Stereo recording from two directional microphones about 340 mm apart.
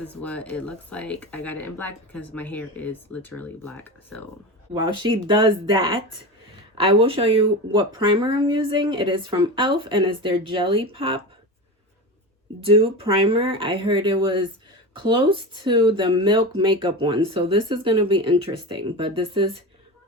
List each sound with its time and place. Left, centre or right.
0.0 s speech: centre
4.7 s speech: centre
12.6 s speech: centre